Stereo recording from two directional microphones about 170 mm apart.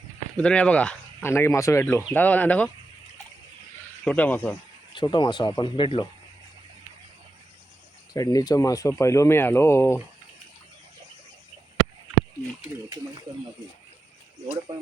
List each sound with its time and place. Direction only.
0.3 s speech: 5° left (ahead or behind)
4.0 s speech: 10° left (ahead or behind)
4.9 s speech: 25° left (ahead or behind)
8.1 s speech: 20° left (ahead or behind)